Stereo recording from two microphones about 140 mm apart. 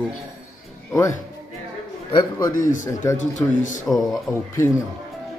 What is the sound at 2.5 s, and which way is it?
Speech, 70° left (ahead or behind).